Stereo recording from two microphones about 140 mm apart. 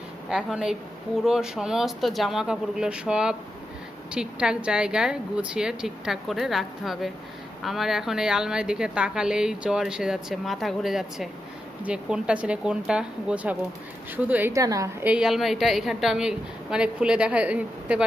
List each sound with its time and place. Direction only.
0.3 s a woman's voice: 5° right (ahead or behind)
14.5 s a woman's voice: 25° right (ahead or behind)
15.0 s a woman's voice: 5° right (ahead or behind)